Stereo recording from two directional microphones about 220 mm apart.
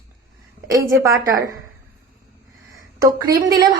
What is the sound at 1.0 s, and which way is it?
Speech, 15° right (ahead or behind).